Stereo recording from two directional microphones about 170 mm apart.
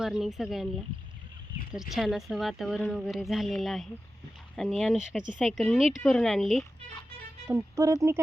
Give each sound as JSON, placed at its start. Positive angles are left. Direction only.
{"t": 0.0, "sound": "speech", "side_deg": 0}
{"t": 1.7, "sound": "speech", "side_deg": 0}
{"t": 7.4, "sound": "speech", "side_deg": -15}